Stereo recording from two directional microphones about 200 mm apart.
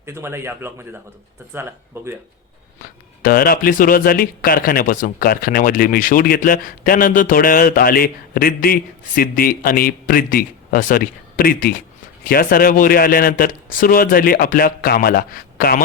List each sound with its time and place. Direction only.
0.0 s speech: 10° right (ahead or behind)
2.0 s speech: 10° right (ahead or behind)
3.2 s a man's voice: 45° left (ahead or behind)